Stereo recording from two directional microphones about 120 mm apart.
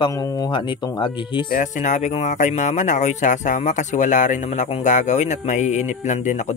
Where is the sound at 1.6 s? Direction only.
85° left; by 4.8 s 60° left (ahead or behind).